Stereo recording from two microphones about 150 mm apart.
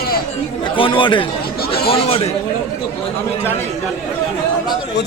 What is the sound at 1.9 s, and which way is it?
Speech, 40° left (ahead or behind).